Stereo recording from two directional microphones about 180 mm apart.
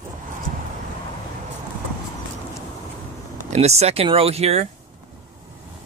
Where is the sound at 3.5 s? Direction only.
35° right (ahead or behind).